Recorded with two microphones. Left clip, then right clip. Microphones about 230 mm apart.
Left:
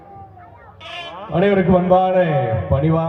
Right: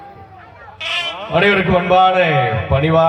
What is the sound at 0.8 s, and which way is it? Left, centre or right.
A man's voice, right.